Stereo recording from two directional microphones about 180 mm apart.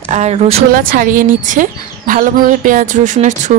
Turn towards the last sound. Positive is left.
turn(degrees=-45)  # may be behind; listen again after turning